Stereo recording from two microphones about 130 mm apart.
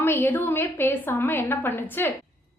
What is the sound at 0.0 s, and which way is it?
A woman's voice, 15° left (ahead or behind).